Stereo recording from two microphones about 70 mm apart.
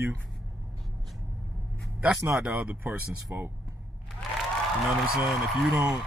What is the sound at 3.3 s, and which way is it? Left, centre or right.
Speech, right.